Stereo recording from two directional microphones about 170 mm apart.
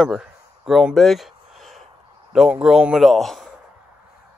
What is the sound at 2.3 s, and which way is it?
A man's voice, 5° right (ahead or behind).